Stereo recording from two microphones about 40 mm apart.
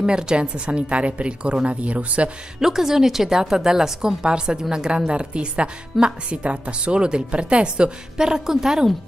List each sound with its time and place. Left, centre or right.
0.0 s a woman's voice: right
2.6 s a woman's voice: centre